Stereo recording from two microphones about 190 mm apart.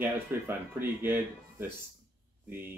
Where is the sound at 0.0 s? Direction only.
10° right (ahead or behind).